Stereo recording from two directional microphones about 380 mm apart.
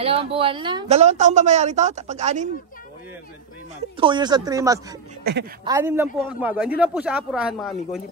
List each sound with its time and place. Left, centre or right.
0.0 s a woman's voice: centre
4.0 s a woman's voice: centre
5.2 s a woman's voice: right
5.7 s a woman's voice: centre